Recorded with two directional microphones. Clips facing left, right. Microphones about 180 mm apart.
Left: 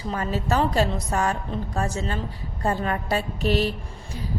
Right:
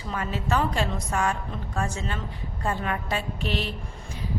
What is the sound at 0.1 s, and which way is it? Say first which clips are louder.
A woman's voice: left 2 dB; 40° left (ahead or behind).